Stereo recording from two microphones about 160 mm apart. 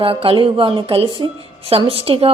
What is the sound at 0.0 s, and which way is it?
Speech, 35° right (ahead or behind).